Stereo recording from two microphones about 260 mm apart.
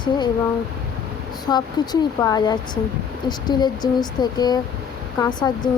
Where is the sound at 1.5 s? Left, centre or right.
Centre.